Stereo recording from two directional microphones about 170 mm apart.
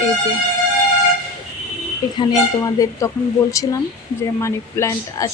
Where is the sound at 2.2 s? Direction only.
20° left (ahead or behind).